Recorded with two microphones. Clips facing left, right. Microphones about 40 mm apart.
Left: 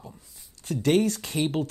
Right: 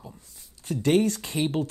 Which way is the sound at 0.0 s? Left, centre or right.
Centre.